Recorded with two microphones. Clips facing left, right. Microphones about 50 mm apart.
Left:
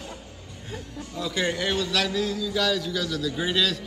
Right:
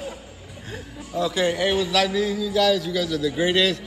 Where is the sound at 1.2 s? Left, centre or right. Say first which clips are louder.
Right 5 dB; centre.